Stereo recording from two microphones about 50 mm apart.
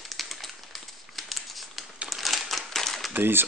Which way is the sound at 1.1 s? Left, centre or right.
Centre.